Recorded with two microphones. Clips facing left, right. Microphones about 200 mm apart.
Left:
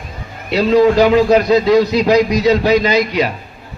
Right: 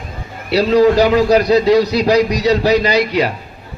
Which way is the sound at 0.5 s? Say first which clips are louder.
Even; 35° right (ahead or behind).